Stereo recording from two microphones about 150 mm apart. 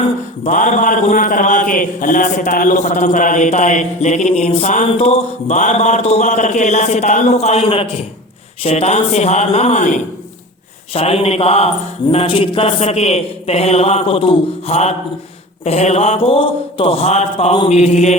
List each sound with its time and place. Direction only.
0.4 s speech: 55° left (ahead or behind)
4.9 s mantra: 45° left (ahead or behind)
10.9 s speech: 40° left (ahead or behind)
12.1 s mantra: 40° left (ahead or behind)